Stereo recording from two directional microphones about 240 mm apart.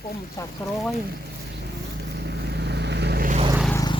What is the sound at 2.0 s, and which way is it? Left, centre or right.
Vehicle, right.